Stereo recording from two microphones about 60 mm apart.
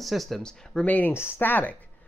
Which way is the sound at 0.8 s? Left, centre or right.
Left.